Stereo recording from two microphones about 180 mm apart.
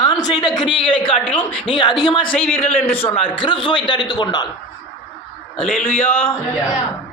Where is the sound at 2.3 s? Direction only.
10° left (ahead or behind).